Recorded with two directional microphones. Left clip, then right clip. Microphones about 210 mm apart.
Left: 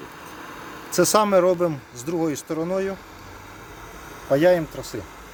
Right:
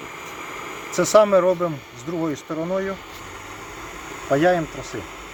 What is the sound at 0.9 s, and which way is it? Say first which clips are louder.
Speech: right 2 dB; 40° left (ahead or behind).